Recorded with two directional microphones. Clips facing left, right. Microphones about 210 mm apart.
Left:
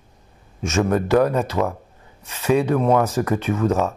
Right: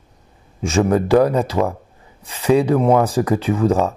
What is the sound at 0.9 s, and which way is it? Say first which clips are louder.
Speech: right 3 dB; 35° right (ahead or behind).